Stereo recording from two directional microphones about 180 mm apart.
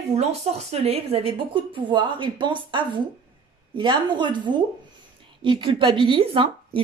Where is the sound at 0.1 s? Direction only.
35° right (ahead or behind).